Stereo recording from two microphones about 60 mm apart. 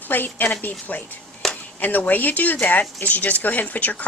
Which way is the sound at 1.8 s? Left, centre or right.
Left.